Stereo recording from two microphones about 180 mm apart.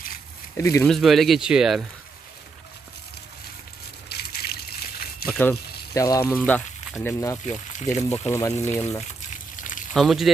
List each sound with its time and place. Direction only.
0.5 s speech: 15° left (ahead or behind)
0.9 s speech: centre (ahead or behind)
4.1 s trickle: 60° left (ahead or behind)
5.3 s speech: 10° left (ahead or behind)
7.5 s speech: 40° left (ahead or behind)
8.3 s speech: 15° left (ahead or behind)
9.0 s a sound: 45° left (ahead or behind)
9.9 s speech: centre (ahead or behind)